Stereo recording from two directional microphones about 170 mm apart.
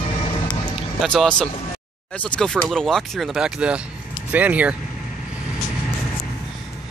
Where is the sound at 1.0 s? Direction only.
Centre (ahead or behind).